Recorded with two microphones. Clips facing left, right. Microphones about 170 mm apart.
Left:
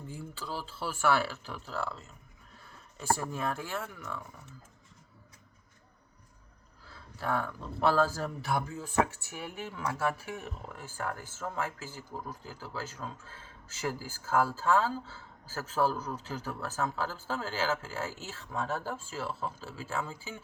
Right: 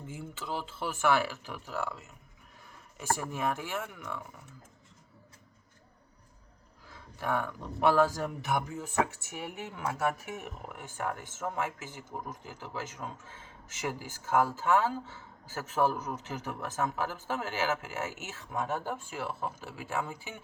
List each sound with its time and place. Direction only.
0.0 s speech: 20° right (ahead or behind)
3.2 s speech: 20° right (ahead or behind)
6.9 s speech: 15° right (ahead or behind)
14.3 s speech: 15° right (ahead or behind)